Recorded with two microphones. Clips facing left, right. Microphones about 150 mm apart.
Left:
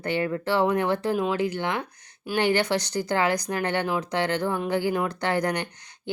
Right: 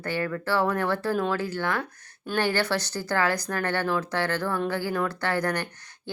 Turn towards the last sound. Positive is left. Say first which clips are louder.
# left 2 dB
turn(degrees=15)  # may be behind; listen again after turning